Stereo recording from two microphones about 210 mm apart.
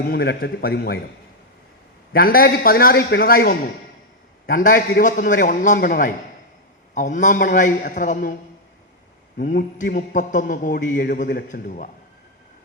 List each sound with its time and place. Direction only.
0.0 s a man's voice: 50° left (ahead or behind)
2.1 s a man's voice: 45° left (ahead or behind)
9.4 s a man's voice: 40° left (ahead or behind)